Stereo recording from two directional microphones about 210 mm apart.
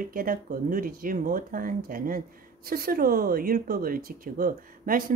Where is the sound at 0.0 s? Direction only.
40° right (ahead or behind).